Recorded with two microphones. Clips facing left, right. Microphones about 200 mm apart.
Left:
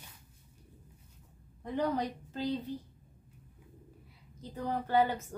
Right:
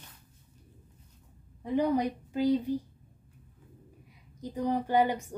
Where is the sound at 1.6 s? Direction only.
10° right (ahead or behind).